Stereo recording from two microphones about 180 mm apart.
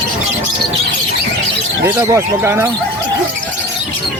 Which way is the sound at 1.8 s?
15° right (ahead or behind).